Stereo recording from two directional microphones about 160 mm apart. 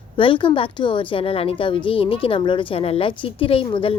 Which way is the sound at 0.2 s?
30° left (ahead or behind).